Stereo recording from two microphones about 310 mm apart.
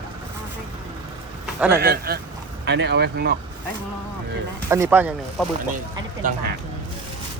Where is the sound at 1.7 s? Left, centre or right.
Right.